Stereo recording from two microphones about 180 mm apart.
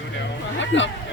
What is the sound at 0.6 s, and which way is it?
Speech, 90° left.